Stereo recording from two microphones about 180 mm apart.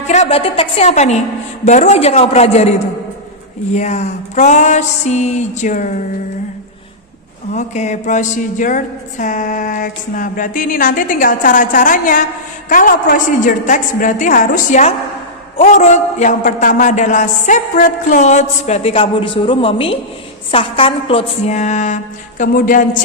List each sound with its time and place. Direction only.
0.1 s a man's voice: 35° left (ahead or behind)
3.8 s a man's voice: 40° left (ahead or behind)
7.5 s a sound: 40° left (ahead or behind)
15.5 s a man's voice: 40° left (ahead or behind)